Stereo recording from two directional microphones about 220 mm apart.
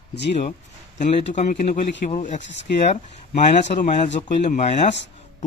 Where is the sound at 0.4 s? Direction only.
35° left (ahead or behind).